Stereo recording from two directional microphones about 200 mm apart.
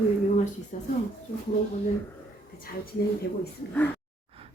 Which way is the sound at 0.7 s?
40° left (ahead or behind).